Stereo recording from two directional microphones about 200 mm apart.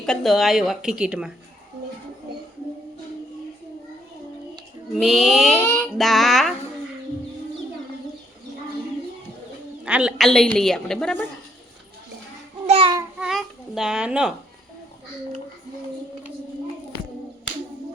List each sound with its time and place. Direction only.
0.0 s a woman's voice: centre (ahead or behind)
4.9 s a woman's voice: centre (ahead or behind)
9.8 s a woman's voice: 5° right (ahead or behind)
12.6 s child singing: 30° right (ahead or behind)
13.1 s a sound: centre (ahead or behind)